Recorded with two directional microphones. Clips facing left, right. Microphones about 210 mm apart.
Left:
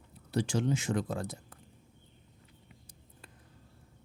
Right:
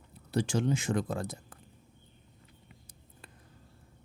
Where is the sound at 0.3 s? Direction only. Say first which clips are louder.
Right 1 dB; 50° right (ahead or behind).